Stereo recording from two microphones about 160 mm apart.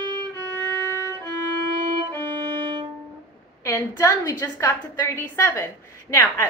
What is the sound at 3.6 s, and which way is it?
A woman's voice, 20° left (ahead or behind).